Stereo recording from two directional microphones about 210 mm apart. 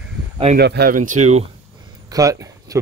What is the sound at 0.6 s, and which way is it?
Speech, 50° right (ahead or behind).